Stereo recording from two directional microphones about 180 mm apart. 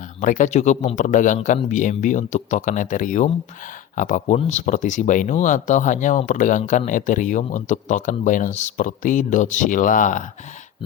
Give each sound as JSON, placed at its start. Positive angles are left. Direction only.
{"t": 0.2, "sound": "speech", "side_deg": 45}